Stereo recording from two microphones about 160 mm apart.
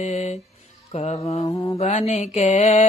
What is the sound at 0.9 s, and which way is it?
Speech, 40° left (ahead or behind).